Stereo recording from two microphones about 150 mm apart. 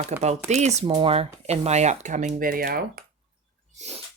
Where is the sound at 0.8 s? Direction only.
35° right (ahead or behind); by 2.8 s 75° right (ahead or behind).